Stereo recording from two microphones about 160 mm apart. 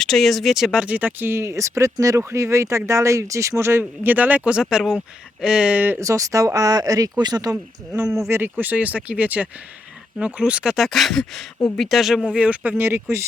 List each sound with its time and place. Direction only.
0.0 s speech: 5° left (ahead or behind); by 13.2 s 15° right (ahead or behind)